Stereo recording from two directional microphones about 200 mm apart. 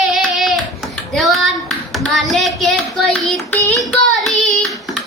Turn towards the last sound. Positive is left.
turn(degrees=0)  # may be behind; listen again after turning